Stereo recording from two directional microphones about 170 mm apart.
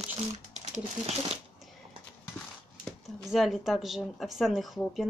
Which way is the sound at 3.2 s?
Centre (ahead or behind).